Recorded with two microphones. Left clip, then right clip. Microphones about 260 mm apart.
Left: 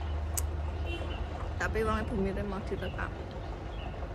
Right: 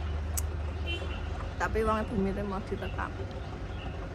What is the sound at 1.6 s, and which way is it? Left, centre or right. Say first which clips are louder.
Speech: right 3 dB; centre.